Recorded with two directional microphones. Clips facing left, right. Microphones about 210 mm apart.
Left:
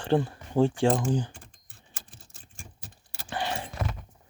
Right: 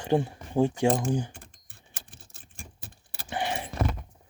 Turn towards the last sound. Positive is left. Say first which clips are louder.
# right 1 dB
turn(degrees=-15)  # may be behind; listen again after turning